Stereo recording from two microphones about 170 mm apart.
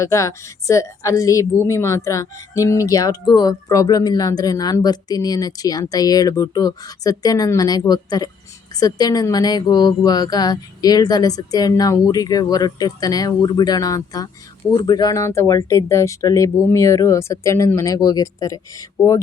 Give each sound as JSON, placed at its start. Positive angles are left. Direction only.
{"t": 0.0, "sound": "a woman's voice", "side_deg": 15}